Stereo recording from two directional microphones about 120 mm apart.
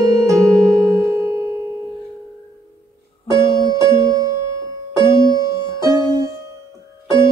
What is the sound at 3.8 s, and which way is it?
Music, 30° right (ahead or behind).